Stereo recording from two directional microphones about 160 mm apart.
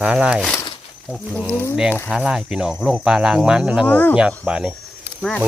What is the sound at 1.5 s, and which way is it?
Speech, 10° left (ahead or behind).